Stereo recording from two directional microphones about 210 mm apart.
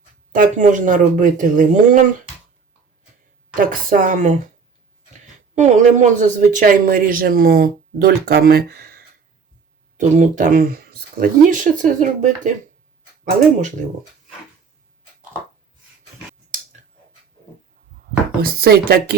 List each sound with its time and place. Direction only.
0.3 s speech: 35° right (ahead or behind)
3.5 s speech: 40° right (ahead or behind)
10.0 s speech: 35° right (ahead or behind)
18.4 s speech: 45° right (ahead or behind)